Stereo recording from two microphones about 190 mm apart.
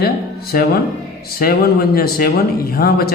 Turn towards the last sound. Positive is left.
turn(degrees=55)  # may be behind; listen again after turning